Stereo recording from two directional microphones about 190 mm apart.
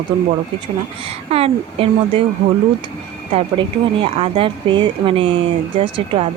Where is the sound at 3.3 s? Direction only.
30° right (ahead or behind).